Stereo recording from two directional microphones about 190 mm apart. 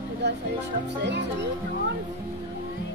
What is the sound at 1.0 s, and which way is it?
Music, 65° right (ahead or behind).